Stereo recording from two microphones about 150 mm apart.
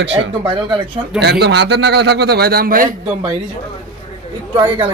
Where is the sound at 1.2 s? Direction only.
90° right; by 2.9 s 70° right (ahead or behind).